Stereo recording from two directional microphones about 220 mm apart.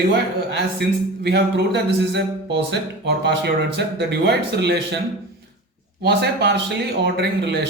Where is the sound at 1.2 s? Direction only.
50° right (ahead or behind).